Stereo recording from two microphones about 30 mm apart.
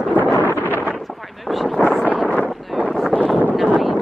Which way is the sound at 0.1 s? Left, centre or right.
Left.